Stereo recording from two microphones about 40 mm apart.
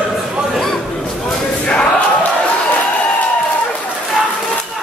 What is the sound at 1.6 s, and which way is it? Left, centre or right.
Crowd, left.